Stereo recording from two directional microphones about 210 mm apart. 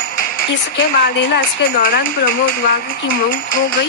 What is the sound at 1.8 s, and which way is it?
Speech, 45° left (ahead or behind).